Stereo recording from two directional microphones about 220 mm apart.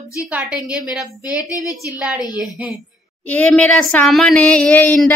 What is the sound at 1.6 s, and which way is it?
Speech, 15° left (ahead or behind).